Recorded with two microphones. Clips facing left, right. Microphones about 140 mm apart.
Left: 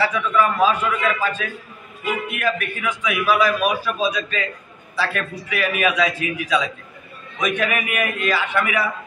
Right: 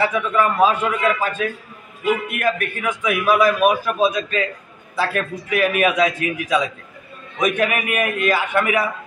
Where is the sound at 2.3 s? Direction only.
50° right (ahead or behind).